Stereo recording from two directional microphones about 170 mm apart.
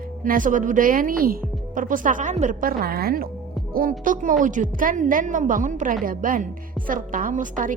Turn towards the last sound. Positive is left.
turn(degrees=-50)  # may be behind; listen again after turning